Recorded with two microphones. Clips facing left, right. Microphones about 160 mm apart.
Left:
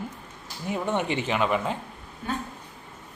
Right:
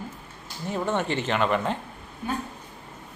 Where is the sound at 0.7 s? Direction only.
15° left (ahead or behind).